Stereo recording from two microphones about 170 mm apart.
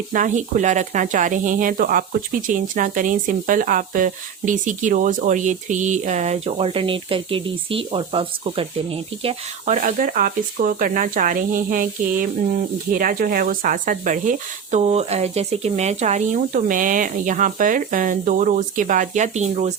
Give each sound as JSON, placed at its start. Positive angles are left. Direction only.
{"t": 0.1, "sound": "speech", "side_deg": -50}